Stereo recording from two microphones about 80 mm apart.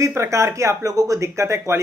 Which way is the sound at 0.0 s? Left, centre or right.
Right.